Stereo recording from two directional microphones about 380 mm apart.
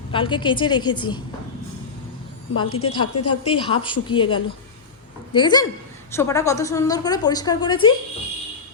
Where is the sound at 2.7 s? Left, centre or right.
Left.